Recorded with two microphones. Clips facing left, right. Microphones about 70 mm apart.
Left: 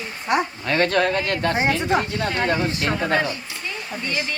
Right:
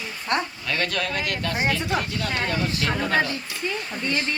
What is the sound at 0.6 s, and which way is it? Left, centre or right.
Speech, left.